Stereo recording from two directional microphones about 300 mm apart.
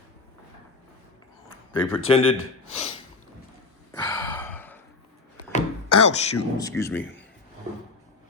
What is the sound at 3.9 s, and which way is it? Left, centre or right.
Gasp, centre.